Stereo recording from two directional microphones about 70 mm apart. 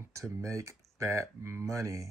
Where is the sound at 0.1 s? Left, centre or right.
Right.